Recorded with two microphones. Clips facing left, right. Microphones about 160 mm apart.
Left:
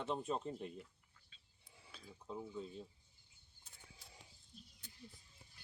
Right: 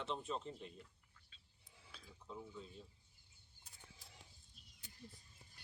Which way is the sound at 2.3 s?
20° left (ahead or behind).